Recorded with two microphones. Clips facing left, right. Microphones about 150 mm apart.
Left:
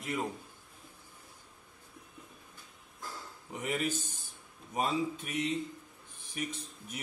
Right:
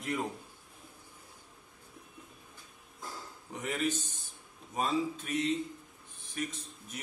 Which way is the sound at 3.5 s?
5° left (ahead or behind).